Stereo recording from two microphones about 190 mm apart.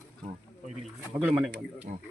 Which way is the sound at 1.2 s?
5° right (ahead or behind).